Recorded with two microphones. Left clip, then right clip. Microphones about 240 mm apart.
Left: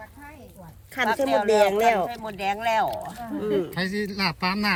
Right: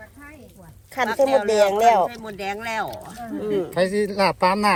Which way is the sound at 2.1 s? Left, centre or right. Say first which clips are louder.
Left 2 dB; left.